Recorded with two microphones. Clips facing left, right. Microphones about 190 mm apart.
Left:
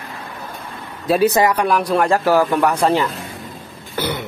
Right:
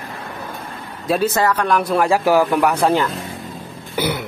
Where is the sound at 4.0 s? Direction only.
10° right (ahead or behind).